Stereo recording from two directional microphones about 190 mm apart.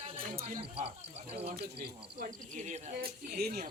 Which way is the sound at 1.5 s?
55° right (ahead or behind).